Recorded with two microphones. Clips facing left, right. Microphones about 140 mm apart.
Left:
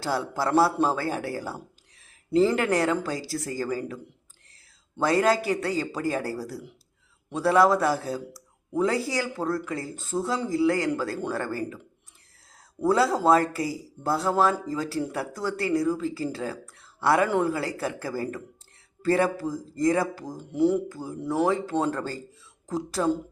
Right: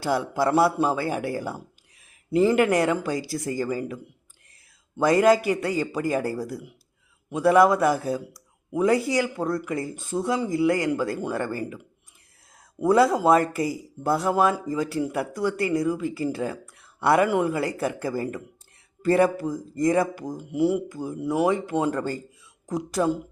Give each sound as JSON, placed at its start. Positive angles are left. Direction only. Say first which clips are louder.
{"t": 0.0, "sound": "speech", "louder": "right 4 dB", "side_deg": -15}